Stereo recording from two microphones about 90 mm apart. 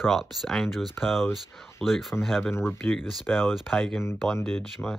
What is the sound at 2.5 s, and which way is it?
Speech, 25° left (ahead or behind).